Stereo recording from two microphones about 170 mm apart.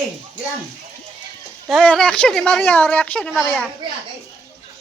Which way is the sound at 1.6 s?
5° left (ahead or behind).